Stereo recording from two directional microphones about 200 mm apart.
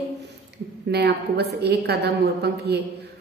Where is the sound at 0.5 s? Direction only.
55° right (ahead or behind).